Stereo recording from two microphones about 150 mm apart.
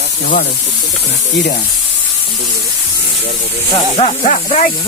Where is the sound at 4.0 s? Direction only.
45° left (ahead or behind).